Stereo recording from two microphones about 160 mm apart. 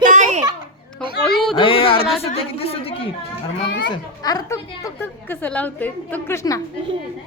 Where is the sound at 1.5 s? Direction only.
35° left (ahead or behind).